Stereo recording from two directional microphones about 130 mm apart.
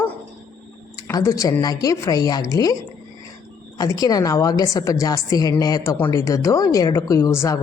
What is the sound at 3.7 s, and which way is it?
A woman's voice, 30° left (ahead or behind).